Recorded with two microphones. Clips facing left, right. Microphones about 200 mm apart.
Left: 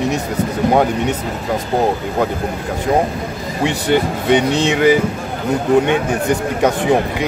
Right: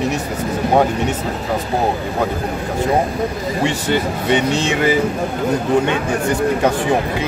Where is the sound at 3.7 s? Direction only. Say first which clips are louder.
Left 6 dB; 15° left (ahead or behind).